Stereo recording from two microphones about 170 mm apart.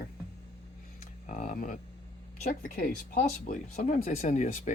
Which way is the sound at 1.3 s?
50° left (ahead or behind).